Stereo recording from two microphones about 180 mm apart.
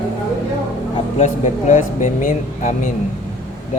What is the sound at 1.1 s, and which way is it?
Speech, 45° left (ahead or behind).